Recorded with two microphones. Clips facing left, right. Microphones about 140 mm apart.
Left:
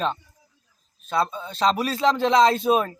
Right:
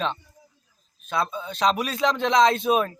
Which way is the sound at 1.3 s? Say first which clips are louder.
Left 1 dB; centre (ahead or behind).